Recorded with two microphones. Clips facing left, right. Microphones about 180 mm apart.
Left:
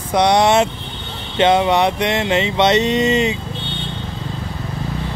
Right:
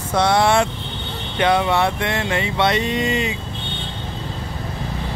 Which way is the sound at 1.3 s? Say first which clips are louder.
Left 4 dB; 20° left (ahead or behind).